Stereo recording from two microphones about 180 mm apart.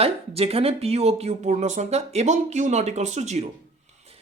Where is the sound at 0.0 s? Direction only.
35° right (ahead or behind).